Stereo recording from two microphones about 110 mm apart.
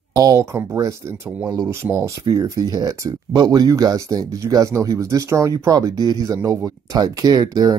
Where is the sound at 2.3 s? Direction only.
35° right (ahead or behind).